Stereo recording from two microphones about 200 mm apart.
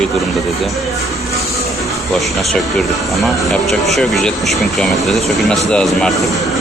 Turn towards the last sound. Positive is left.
turn(degrees=0)  # may be behind; listen again after turning